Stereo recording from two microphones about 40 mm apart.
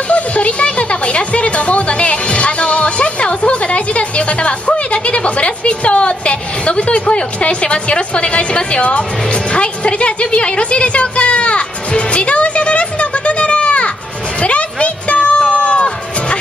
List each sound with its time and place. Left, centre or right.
0.1 s music: left
14.4 s a sound: left
15.5 s music: left